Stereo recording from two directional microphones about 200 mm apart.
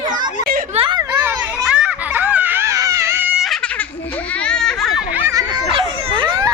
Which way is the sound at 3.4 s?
Centre (ahead or behind).